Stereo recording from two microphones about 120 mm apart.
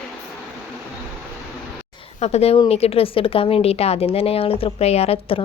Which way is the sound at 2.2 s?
60° left (ahead or behind).